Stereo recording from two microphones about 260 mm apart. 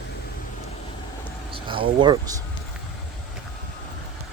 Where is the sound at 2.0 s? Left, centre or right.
Centre.